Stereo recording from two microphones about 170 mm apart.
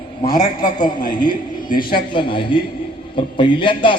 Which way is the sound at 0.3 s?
55° left (ahead or behind).